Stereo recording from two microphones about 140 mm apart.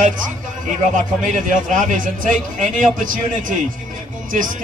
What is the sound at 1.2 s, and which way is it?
A man's voice, 65° right (ahead or behind).